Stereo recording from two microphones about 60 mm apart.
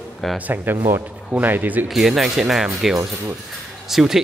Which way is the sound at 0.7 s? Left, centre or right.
Right.